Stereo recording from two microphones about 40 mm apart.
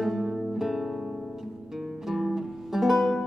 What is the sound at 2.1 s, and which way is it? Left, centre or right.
Music, centre.